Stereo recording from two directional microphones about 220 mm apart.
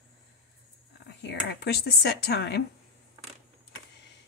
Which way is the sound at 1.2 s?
50° left (ahead or behind).